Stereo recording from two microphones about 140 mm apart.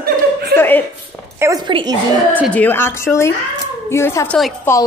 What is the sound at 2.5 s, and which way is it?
A woman's voice, 15° left (ahead or behind).